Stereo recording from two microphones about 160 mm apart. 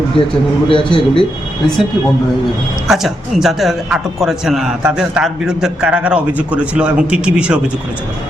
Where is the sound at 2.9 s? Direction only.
Centre (ahead or behind).